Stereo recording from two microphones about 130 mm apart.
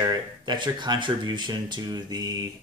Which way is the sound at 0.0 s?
30° right (ahead or behind).